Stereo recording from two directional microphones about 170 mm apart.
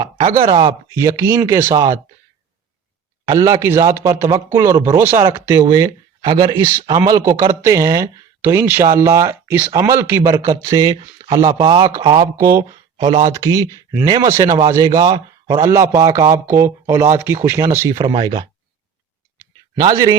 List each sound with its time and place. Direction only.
0.0 s speech: 25° right (ahead or behind)
3.2 s speech: 20° right (ahead or behind)
18.1 s speech: 30° right (ahead or behind)
19.4 s a sound: 20° right (ahead or behind)